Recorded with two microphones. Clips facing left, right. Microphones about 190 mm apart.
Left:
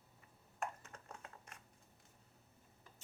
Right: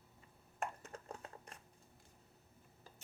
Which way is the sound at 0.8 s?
35° right (ahead or behind).